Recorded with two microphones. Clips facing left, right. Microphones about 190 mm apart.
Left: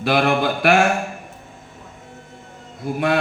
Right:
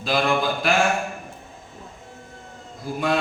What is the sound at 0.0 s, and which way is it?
Mantra, 65° left (ahead or behind).